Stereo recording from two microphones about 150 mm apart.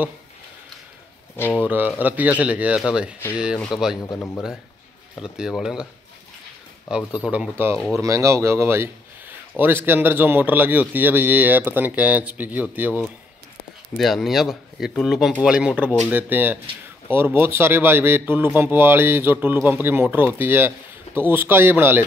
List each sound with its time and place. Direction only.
1.3 s speech: 15° left (ahead or behind)
2.0 s speech: 10° right (ahead or behind)
5.2 s speech: 5° right (ahead or behind)
6.9 s speech: 5° right (ahead or behind)
7.7 s speech: 5° left (ahead or behind)
8.0 s speech: 20° right (ahead or behind)
13.9 s speech: centre (ahead or behind)